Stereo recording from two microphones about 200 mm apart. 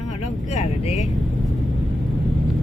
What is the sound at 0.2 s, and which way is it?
Vehicle, 35° left (ahead or behind).